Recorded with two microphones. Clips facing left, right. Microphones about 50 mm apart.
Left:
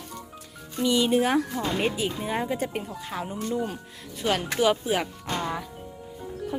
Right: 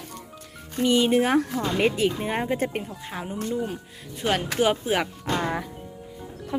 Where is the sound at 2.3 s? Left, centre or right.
Right.